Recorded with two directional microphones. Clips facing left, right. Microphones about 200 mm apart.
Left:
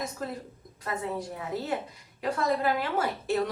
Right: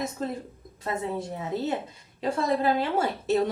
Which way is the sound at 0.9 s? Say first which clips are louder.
Right 3 dB; 25° right (ahead or behind).